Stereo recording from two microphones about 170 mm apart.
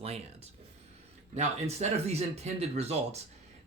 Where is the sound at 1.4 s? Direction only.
40° right (ahead or behind).